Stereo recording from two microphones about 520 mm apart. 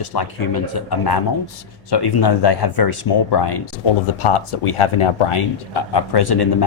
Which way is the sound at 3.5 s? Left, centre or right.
Left.